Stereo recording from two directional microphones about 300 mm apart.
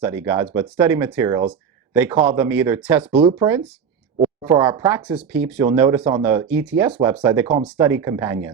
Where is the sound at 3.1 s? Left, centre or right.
Centre.